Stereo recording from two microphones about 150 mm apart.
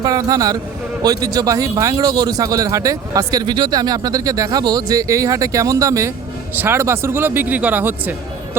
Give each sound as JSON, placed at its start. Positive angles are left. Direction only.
{"t": 0.0, "sound": "a man's voice", "side_deg": -25}